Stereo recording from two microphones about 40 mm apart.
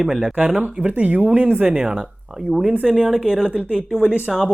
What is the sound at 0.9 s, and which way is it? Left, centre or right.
Speech, right.